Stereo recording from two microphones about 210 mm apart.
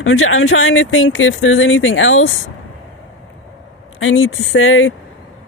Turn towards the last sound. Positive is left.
turn(degrees=70)  # may be behind; listen again after turning